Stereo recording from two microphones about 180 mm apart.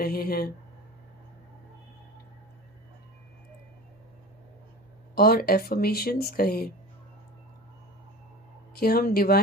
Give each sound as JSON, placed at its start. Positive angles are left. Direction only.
{"t": 0.0, "sound": "speech", "side_deg": 55}
{"t": 5.1, "sound": "speech", "side_deg": 55}
{"t": 8.7, "sound": "speech", "side_deg": 55}